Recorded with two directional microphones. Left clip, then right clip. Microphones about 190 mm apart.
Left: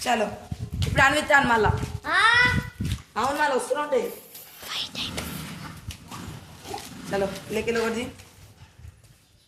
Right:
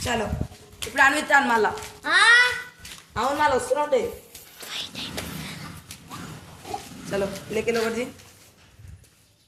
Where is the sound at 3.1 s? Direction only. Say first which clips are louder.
Even; 20° left (ahead or behind).